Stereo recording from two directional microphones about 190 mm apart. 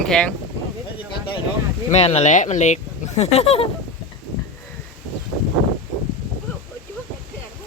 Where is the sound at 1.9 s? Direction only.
35° left (ahead or behind).